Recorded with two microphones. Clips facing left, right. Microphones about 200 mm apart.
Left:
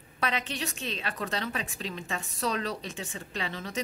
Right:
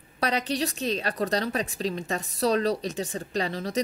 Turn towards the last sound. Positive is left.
turn(degrees=-35)  # may be behind; listen again after turning